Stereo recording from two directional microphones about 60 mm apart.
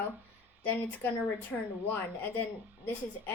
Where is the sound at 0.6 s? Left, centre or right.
Left.